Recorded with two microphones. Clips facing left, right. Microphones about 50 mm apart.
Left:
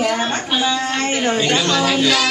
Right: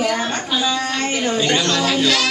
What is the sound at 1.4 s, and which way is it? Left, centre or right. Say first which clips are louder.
Speech: left 1 dB; centre.